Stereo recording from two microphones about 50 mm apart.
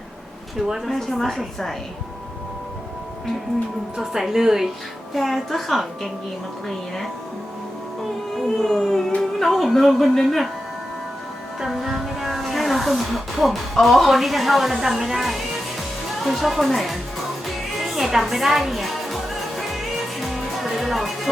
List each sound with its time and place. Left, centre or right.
0.9 s a woman's voice: centre
3.9 s a woman's voice: centre
8.4 s a woman's voice: centre
11.6 s a woman's voice: centre
17.4 s music: centre